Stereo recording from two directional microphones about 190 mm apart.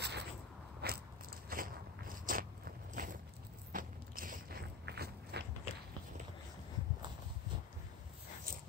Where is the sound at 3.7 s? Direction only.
45° right (ahead or behind).